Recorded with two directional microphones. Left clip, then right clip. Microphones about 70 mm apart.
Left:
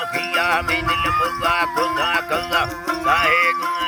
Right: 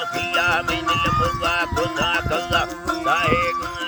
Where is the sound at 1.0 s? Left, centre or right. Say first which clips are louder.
Left 1 dB; left.